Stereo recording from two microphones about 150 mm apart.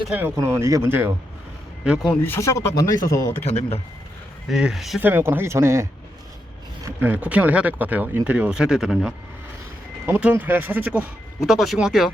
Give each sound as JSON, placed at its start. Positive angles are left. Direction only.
{"t": 0.1, "sound": "speech", "side_deg": -10}
{"t": 2.2, "sound": "speech", "side_deg": 15}
{"t": 3.4, "sound": "speech", "side_deg": 45}
{"t": 4.4, "sound": "speech", "side_deg": 0}
{"t": 4.9, "sound": "speech", "side_deg": -15}
{"t": 7.0, "sound": "speech", "side_deg": -10}